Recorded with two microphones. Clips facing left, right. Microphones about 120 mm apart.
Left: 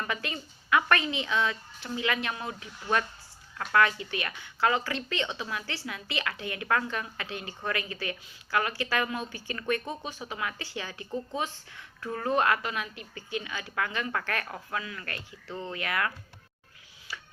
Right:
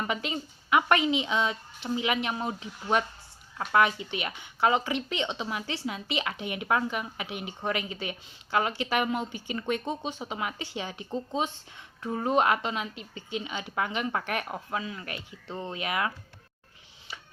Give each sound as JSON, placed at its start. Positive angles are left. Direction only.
{"t": 0.0, "sound": "a woman's voice", "side_deg": -20}